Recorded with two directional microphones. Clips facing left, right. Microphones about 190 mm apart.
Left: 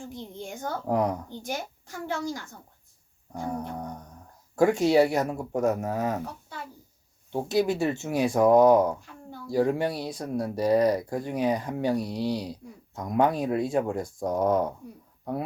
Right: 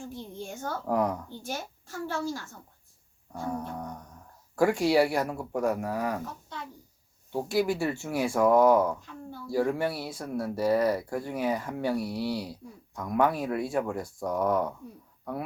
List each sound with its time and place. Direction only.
0.0 s speech: 15° left (ahead or behind)
7.3 s speech: 20° left (ahead or behind)